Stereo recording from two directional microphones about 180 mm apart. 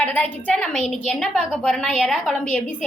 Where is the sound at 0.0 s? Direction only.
5° left (ahead or behind).